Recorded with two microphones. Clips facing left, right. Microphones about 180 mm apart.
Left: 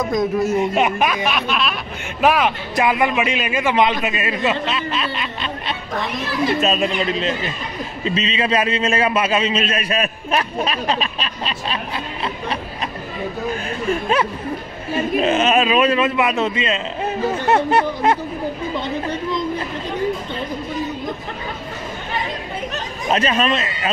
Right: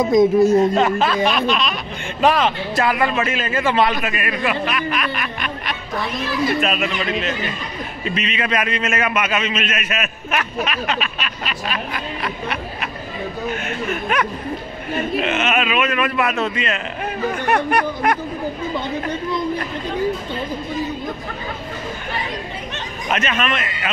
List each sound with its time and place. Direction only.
0.0 s speech: 25° right (ahead or behind)
0.7 s a man's voice: 15° left (ahead or behind)
23.0 s a man's voice: 30° left (ahead or behind)